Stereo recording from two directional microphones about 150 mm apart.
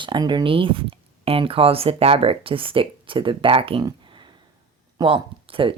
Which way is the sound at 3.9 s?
30° right (ahead or behind).